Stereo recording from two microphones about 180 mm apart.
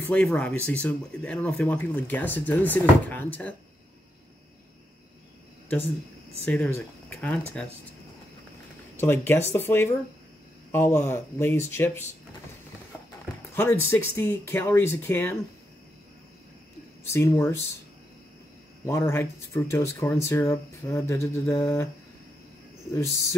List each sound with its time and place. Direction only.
0.1 s speech: 5° left (ahead or behind)
6.4 s speech: 10° left (ahead or behind)
9.0 s speech: 10° left (ahead or behind)
13.6 s speech: 10° left (ahead or behind)
17.1 s speech: 15° left (ahead or behind)
18.9 s speech: 15° left (ahead or behind)